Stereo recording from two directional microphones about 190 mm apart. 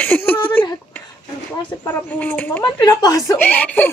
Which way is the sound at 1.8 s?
10° left (ahead or behind).